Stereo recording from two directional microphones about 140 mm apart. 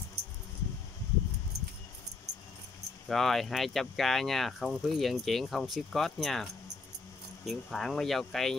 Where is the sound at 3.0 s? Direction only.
Centre (ahead or behind).